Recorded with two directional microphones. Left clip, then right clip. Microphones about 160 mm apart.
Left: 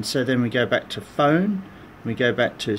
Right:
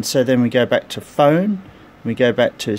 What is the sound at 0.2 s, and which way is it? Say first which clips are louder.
Speech: right 7 dB; 50° right (ahead or behind).